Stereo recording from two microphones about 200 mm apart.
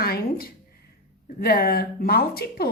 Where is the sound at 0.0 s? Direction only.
50° left (ahead or behind).